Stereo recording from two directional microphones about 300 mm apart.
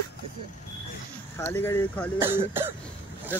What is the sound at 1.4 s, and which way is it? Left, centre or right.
Speech, centre.